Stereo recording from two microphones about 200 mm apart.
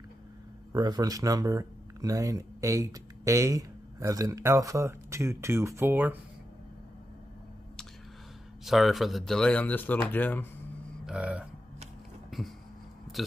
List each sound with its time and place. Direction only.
0.7 s speech: 20° right (ahead or behind)
8.6 s speech: centre (ahead or behind)
11.1 s speech: 5° right (ahead or behind)
12.3 s a sound: centre (ahead or behind)